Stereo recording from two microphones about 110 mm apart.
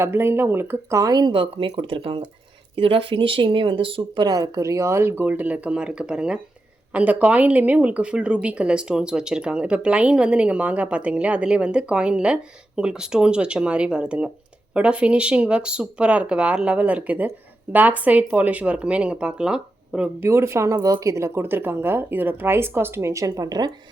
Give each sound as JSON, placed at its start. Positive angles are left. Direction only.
{"t": 0.0, "sound": "speech", "side_deg": -20}
{"t": 20.2, "sound": "speech", "side_deg": -25}